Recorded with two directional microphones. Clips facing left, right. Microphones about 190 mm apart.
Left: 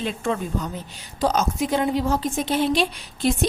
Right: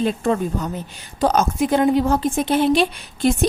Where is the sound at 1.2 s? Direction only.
50° right (ahead or behind).